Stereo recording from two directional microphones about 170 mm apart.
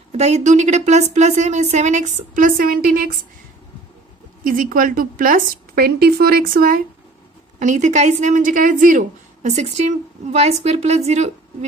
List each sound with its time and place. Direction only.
0.1 s a woman's voice: 40° right (ahead or behind); by 3.2 s 60° right (ahead or behind)
4.5 s a woman's voice: 55° right (ahead or behind)
7.5 s a woman's voice: 45° right (ahead or behind)